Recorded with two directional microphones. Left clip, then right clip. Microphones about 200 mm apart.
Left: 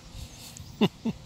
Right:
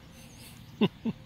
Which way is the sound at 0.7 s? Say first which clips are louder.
Left 2 dB; 15° left (ahead or behind).